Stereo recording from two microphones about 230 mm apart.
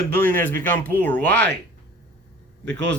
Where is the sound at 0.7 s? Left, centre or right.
Right.